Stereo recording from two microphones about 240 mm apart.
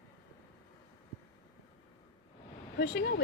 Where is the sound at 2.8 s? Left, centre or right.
Left.